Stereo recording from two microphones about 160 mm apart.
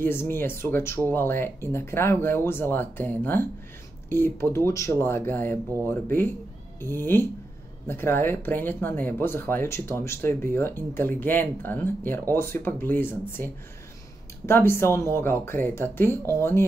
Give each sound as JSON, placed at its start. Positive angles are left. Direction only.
{"t": 0.0, "sound": "speech", "side_deg": 15}